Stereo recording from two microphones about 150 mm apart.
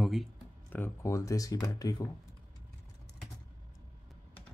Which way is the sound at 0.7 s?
15° left (ahead or behind).